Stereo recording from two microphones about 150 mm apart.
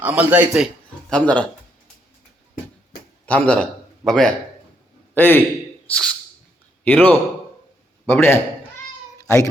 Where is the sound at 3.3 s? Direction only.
10° left (ahead or behind).